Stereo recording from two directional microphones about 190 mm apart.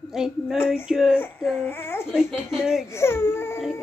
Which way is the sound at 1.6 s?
10° left (ahead or behind).